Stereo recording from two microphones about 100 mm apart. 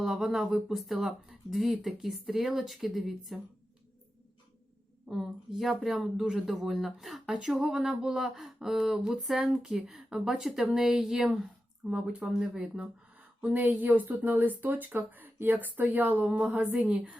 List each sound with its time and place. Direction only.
0.0 s speech: 5° right (ahead or behind)
5.0 s speech: 5° right (ahead or behind)